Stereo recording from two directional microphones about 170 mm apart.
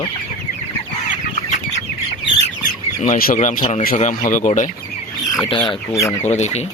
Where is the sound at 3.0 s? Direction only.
55° left (ahead or behind).